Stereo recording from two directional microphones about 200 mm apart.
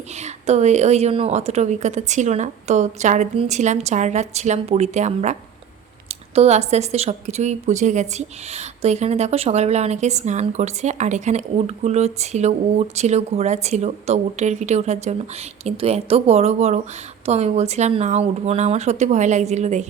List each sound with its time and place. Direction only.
0.2 s a woman's voice: 35° right (ahead or behind)